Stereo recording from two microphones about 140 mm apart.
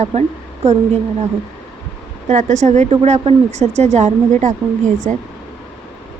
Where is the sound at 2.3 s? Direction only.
60° right (ahead or behind).